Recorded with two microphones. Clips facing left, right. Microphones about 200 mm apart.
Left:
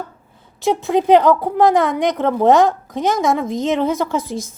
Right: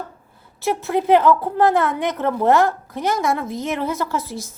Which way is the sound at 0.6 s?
15° left (ahead or behind).